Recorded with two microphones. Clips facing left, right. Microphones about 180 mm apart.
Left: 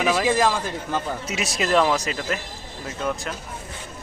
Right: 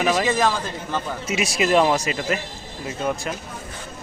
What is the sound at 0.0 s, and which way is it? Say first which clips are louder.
A man's voice: even; 5° left (ahead or behind).